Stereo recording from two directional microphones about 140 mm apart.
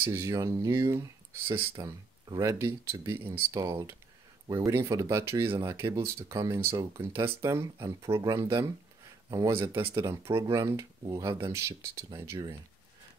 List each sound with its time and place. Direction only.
0.0 s speech: 20° right (ahead or behind)
1.8 s speech: 25° right (ahead or behind)